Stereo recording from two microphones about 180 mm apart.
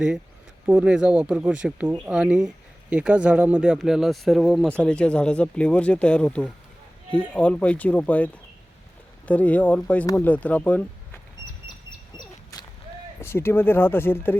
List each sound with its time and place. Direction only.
0.6 s speech: 5° right (ahead or behind); by 11.2 s 10° left (ahead or behind)
12.1 s a sound: 20° left (ahead or behind)
13.2 s speech: 15° left (ahead or behind)